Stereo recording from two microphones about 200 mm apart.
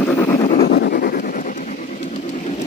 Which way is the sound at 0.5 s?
55° left (ahead or behind).